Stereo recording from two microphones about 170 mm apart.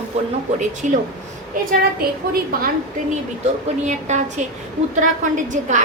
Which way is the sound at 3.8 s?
45° right (ahead or behind).